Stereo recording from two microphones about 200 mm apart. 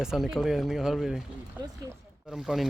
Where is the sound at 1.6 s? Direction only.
10° right (ahead or behind).